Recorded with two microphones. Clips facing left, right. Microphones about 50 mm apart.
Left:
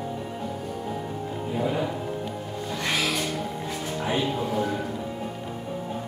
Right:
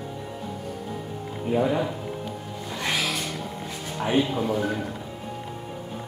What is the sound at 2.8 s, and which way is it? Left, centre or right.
Music, centre.